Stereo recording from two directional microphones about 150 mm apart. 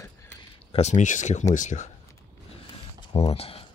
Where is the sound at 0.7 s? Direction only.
45° left (ahead or behind).